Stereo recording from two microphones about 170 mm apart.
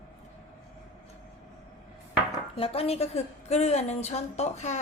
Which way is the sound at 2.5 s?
35° left (ahead or behind).